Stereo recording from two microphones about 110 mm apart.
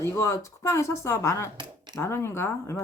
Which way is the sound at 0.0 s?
25° left (ahead or behind).